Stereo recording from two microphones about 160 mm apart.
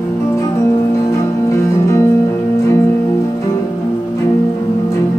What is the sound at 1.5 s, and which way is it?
Music, 20° left (ahead or behind).